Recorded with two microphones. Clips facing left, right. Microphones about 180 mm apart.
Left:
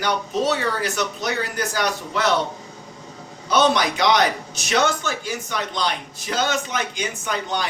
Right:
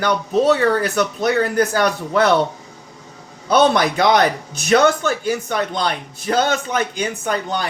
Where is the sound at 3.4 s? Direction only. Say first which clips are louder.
Right 4 dB; 55° right (ahead or behind).